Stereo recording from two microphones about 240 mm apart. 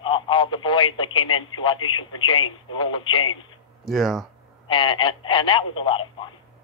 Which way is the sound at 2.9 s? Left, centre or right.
Centre.